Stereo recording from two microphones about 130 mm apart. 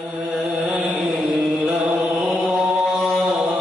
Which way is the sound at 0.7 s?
Centre (ahead or behind).